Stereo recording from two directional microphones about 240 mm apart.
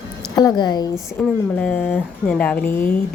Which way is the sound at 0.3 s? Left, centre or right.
Centre.